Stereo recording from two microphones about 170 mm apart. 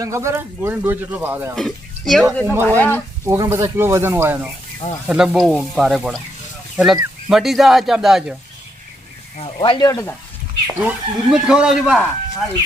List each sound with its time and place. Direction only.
0.0 s speech: 15° right (ahead or behind)
1.5 s speech: centre (ahead or behind)
2.2 s speech: 15° right (ahead or behind)
2.6 s speech: 10° left (ahead or behind)
3.2 s speech: 20° right (ahead or behind); by 8.4 s 5° right (ahead or behind)
9.6 s speech: 25° left (ahead or behind)
10.8 s speech: 5° right (ahead or behind)